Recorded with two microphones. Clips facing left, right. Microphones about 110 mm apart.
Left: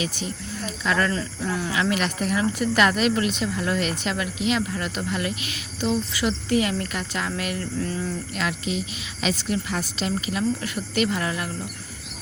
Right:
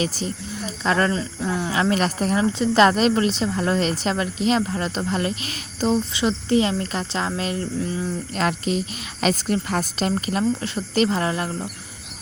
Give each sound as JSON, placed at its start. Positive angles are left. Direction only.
{"t": 0.0, "sound": "speech", "side_deg": -40}
{"t": 1.1, "sound": "speech", "side_deg": -20}
{"t": 1.7, "sound": "speech", "side_deg": -35}
{"t": 6.1, "sound": "speech", "side_deg": -25}
{"t": 8.4, "sound": "speech", "side_deg": -45}
{"t": 10.6, "sound": "speech", "side_deg": -30}